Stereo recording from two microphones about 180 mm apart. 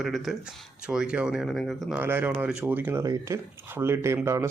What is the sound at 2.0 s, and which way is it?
Speech, 10° right (ahead or behind).